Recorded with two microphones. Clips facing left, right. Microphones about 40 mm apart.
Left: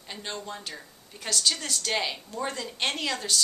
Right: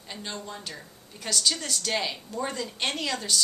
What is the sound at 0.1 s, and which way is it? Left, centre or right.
A woman's voice, centre.